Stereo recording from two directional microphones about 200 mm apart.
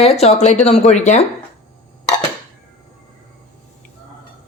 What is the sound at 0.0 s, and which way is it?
Speech, 30° left (ahead or behind).